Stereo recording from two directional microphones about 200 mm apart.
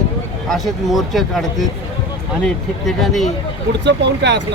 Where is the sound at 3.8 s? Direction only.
60° right (ahead or behind).